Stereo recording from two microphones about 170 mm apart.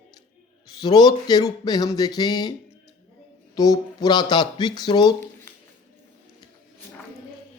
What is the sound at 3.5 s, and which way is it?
Speech, 20° left (ahead or behind).